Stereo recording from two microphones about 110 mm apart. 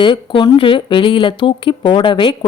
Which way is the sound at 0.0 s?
45° left (ahead or behind).